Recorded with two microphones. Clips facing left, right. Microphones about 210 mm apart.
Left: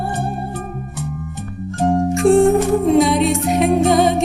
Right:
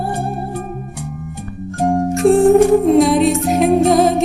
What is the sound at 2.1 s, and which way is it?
Music, centre (ahead or behind).